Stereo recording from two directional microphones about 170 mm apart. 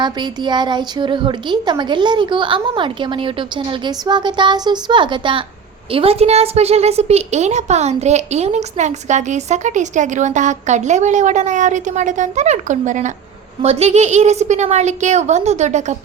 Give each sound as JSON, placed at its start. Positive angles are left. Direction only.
{"t": 0.0, "sound": "a woman's voice", "side_deg": -25}